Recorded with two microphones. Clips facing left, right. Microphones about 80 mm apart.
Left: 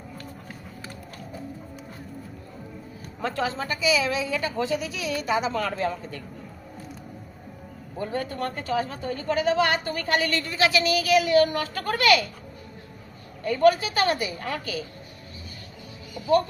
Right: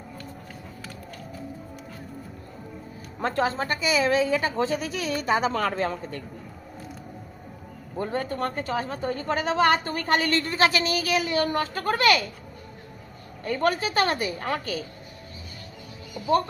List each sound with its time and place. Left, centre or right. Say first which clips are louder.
3.2 s a woman's voice: right 3 dB; right
7.9 s a woman's voice: right 1 dB; right
13.4 s a woman's voice: left 5 dB; right